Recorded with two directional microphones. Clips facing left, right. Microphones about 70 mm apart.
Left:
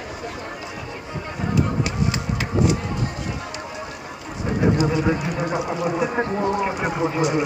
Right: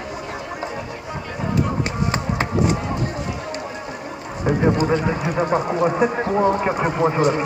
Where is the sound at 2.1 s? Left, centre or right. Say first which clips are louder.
Right 3 dB; right.